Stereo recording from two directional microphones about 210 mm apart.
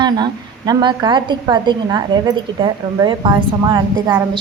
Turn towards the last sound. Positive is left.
turn(degrees=-20)  # may be behind; listen again after turning